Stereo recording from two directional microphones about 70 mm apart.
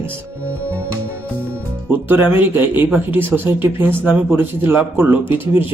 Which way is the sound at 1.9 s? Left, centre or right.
Right.